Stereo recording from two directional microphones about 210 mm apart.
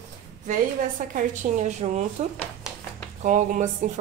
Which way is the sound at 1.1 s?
35° right (ahead or behind).